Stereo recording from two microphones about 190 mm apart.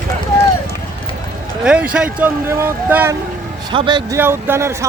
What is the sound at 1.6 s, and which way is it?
Speech, 5° right (ahead or behind).